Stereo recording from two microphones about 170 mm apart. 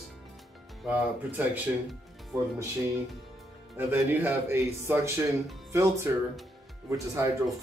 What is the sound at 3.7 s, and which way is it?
Speech, 10° right (ahead or behind).